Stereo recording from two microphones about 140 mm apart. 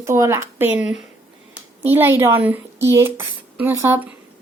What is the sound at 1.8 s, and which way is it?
Speech, 15° right (ahead or behind).